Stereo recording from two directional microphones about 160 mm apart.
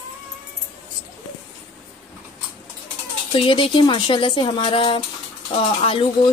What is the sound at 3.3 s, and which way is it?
Speech, 35° left (ahead or behind).